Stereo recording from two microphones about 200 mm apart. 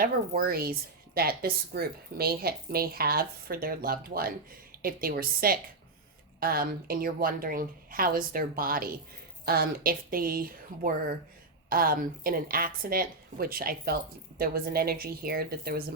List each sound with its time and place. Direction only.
0.0 s a woman's voice: 45° right (ahead or behind)